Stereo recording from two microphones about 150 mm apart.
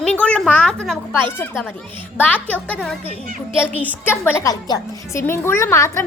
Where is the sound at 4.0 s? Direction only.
15° left (ahead or behind).